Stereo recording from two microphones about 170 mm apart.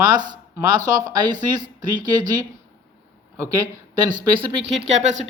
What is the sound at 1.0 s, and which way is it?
Speech, 25° right (ahead or behind).